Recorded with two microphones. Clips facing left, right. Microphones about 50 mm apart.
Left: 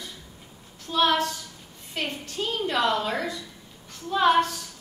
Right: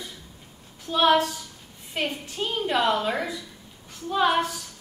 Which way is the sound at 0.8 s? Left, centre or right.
Centre.